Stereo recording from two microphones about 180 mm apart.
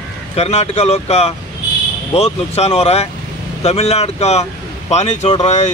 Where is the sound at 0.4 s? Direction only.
35° left (ahead or behind).